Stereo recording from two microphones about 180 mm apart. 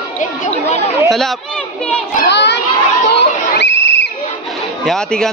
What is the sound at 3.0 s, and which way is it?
Chatter, 75° left (ahead or behind).